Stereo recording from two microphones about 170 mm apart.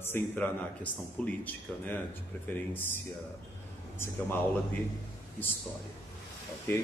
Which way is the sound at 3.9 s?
15° left (ahead or behind).